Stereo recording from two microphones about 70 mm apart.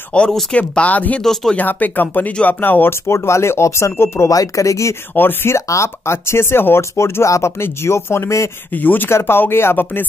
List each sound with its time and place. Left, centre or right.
0.1 s speech: centre
1.2 s speech: centre
1.6 s speech: left
4.3 s speech: left
5.1 s speech: left
5.7 s speech: left
8.7 s speech: left